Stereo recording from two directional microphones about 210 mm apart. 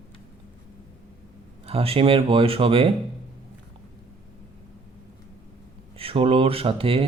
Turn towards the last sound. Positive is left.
turn(degrees=-25)  # may be behind; listen again after turning